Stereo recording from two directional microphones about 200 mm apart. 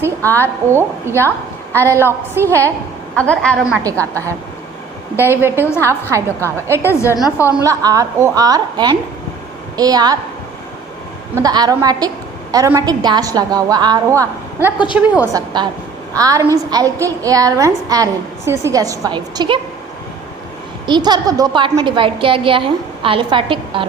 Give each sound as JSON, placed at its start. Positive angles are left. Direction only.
{"t": 0.2, "sound": "a woman's voice", "side_deg": 10}
{"t": 0.7, "sound": "a woman's voice", "side_deg": -10}
{"t": 3.2, "sound": "a woman's voice", "side_deg": 5}
{"t": 5.1, "sound": "a woman's voice", "side_deg": -10}
{"t": 7.3, "sound": "a woman's voice", "side_deg": 15}
{"t": 7.6, "sound": "a woman's voice", "side_deg": -15}
{"t": 11.3, "sound": "a woman's voice", "side_deg": -20}
{"t": 15.3, "sound": "a woman's voice", "side_deg": -20}
{"t": 20.8, "sound": "a woman's voice", "side_deg": -20}